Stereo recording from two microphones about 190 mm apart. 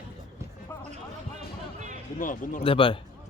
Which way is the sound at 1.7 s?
40° right (ahead or behind).